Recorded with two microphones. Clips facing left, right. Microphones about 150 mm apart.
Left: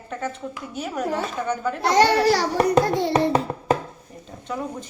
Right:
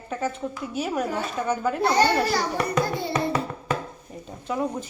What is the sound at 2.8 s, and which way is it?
Speech, 85° left.